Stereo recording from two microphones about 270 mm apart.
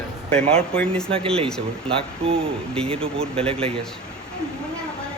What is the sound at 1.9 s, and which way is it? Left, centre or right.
Speech, right.